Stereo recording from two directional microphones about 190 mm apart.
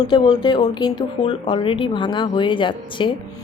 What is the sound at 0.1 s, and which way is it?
Speech, 25° left (ahead or behind).